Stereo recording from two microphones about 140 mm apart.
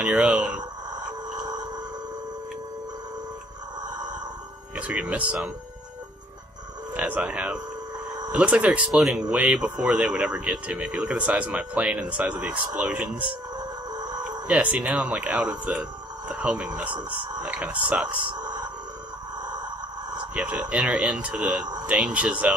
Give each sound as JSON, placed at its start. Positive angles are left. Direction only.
{"t": 0.0, "sound": "speech", "side_deg": -10}
{"t": 0.6, "sound": "a sound", "side_deg": -30}
{"t": 4.7, "sound": "speech", "side_deg": -10}
{"t": 7.0, "sound": "speech", "side_deg": -10}
{"t": 13.9, "sound": "a sound", "side_deg": -30}
{"t": 14.5, "sound": "speech", "side_deg": -10}
{"t": 18.4, "sound": "sonar", "side_deg": -30}
{"t": 20.3, "sound": "speech", "side_deg": -5}